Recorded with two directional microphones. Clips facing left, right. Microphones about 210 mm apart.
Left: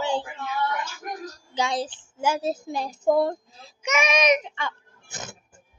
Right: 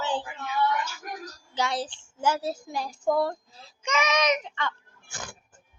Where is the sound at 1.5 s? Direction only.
15° left (ahead or behind).